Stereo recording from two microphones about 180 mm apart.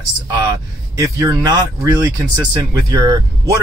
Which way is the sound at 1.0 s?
20° right (ahead or behind).